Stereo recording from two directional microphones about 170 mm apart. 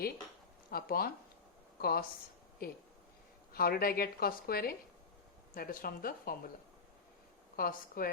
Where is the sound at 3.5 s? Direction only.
60° left (ahead or behind).